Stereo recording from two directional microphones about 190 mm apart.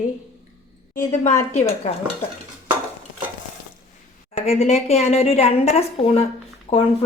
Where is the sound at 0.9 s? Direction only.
40° left (ahead or behind).